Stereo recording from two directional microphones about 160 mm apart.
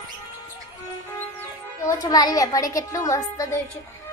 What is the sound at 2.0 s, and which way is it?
A child's voice, 25° left (ahead or behind).